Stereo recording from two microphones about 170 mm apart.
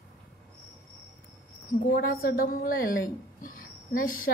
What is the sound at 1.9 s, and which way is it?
A woman's voice, 60° left (ahead or behind).